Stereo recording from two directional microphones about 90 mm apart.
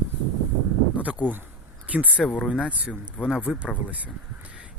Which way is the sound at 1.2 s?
20° right (ahead or behind).